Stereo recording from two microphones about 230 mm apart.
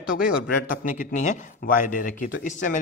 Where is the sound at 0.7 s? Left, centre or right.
Left.